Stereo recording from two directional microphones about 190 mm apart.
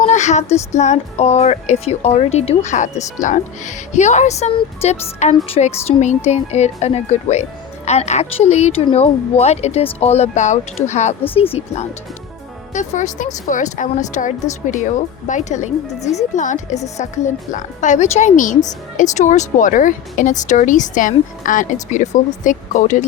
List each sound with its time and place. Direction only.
0.0 s music: 35° left (ahead or behind)